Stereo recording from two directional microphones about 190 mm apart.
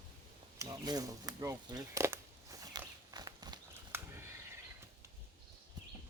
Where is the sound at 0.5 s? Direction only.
20° right (ahead or behind).